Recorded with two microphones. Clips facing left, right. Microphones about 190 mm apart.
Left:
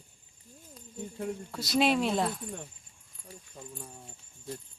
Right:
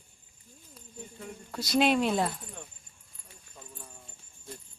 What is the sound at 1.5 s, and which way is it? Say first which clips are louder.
Speech: right 2 dB; centre (ahead or behind).